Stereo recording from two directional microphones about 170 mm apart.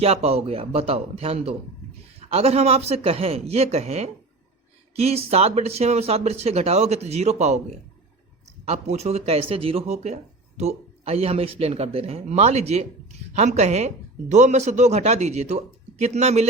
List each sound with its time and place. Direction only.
0.0 s speech: 35° right (ahead or behind)
8.6 s speech: 40° right (ahead or behind)